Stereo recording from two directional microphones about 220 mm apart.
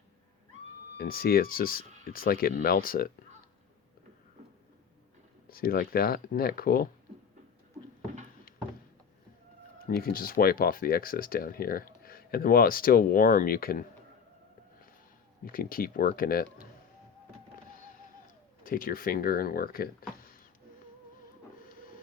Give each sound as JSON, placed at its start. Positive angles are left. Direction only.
{"t": 0.9, "sound": "speech", "side_deg": 40}
{"t": 5.5, "sound": "speech", "side_deg": 40}
{"t": 9.7, "sound": "speech", "side_deg": 40}
{"t": 15.4, "sound": "speech", "side_deg": 40}
{"t": 18.6, "sound": "speech", "side_deg": 40}